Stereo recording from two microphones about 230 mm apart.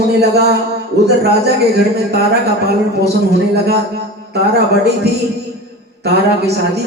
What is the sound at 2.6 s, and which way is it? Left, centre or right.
Speech, right.